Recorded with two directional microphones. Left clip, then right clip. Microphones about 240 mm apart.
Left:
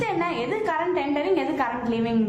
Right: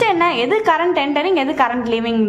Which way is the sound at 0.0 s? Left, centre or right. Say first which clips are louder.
Right 10 dB; right.